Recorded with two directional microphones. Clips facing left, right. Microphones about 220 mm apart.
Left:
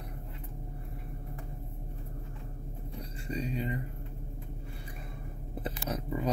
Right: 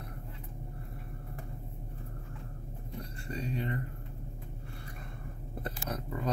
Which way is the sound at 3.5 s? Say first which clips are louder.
Right 2 dB; 5° left (ahead or behind).